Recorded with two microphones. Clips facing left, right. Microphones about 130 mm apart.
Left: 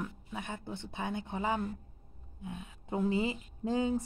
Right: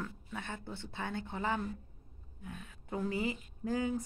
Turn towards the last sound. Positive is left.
turn(degrees=25)  # may be behind; listen again after turning